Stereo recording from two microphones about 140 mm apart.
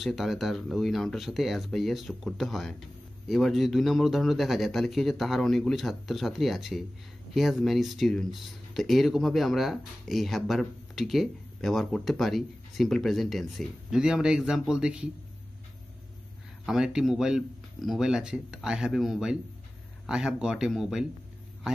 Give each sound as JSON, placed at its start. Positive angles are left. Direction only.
{"t": 0.0, "sound": "speech", "side_deg": 0}
{"t": 16.6, "sound": "speech", "side_deg": -5}